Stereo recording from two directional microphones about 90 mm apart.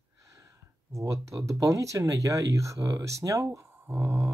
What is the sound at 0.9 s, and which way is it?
Speech, 35° right (ahead or behind).